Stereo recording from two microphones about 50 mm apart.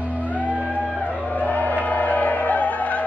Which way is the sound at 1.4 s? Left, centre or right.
Left.